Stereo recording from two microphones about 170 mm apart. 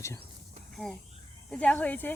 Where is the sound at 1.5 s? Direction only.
5° left (ahead or behind).